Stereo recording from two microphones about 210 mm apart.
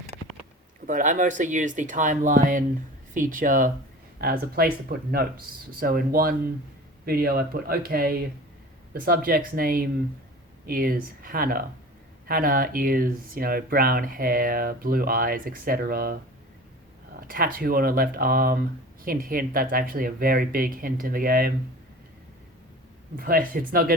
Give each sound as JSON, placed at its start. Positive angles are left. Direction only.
{"t": 0.9, "sound": "speech", "side_deg": -40}
{"t": 17.2, "sound": "speech", "side_deg": -45}
{"t": 23.1, "sound": "speech", "side_deg": -45}